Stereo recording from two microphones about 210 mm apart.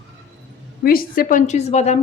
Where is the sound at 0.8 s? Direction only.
45° left (ahead or behind).